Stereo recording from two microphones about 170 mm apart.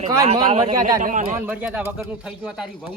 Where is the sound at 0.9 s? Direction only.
50° right (ahead or behind).